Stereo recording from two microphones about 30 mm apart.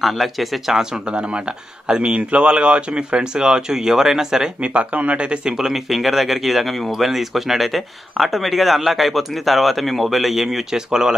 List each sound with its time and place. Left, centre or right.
0.0 s speech: centre
0.9 s speech: right
4.6 s speech: right
5.2 s speech: right
5.7 s speech: centre
10.7 s speech: centre